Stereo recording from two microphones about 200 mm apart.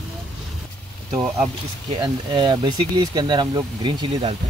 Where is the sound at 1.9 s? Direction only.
25° right (ahead or behind).